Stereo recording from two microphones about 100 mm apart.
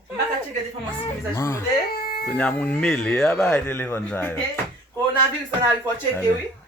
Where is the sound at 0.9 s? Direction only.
30° left (ahead or behind).